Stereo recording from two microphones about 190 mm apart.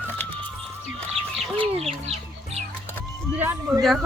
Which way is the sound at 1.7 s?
30° right (ahead or behind).